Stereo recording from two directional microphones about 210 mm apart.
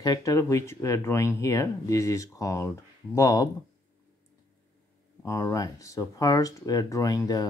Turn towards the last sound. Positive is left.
turn(degrees=15)  # may be behind; listen again after turning